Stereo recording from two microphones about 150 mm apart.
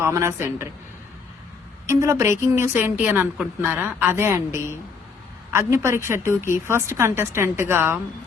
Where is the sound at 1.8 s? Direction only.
20° right (ahead or behind).